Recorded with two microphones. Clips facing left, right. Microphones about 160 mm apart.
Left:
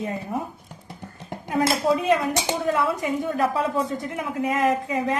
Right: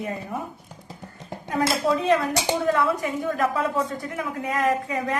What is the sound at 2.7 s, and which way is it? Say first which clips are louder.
Speech: even; 20° left (ahead or behind).